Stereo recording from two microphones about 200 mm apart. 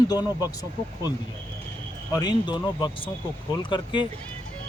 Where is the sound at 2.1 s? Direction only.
20° left (ahead or behind).